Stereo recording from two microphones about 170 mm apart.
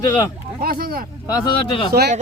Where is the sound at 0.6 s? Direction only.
60° right (ahead or behind).